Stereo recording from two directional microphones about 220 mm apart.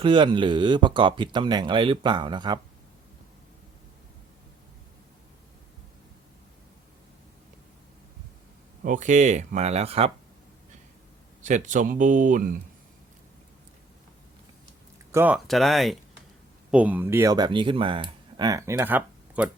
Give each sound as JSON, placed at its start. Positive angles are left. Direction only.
{"t": 0.0, "sound": "speech", "side_deg": -20}
{"t": 8.8, "sound": "speech", "side_deg": -35}
{"t": 11.4, "sound": "speech", "side_deg": -35}
{"t": 15.1, "sound": "speech", "side_deg": -5}